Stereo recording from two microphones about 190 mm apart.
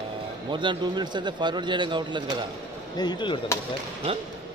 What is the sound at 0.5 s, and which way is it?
A man's voice, 25° right (ahead or behind).